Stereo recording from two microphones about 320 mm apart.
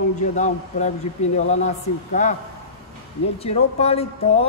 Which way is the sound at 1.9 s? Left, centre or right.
Left.